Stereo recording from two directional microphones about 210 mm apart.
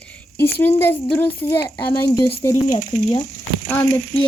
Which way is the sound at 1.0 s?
10° left (ahead or behind).